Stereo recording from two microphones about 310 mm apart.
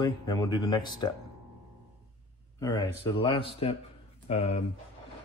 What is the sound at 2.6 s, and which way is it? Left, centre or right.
Speech, centre.